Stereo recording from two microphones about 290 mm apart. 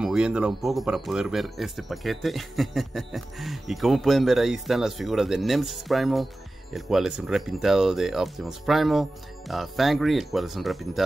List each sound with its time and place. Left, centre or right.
0.0 s speech: centre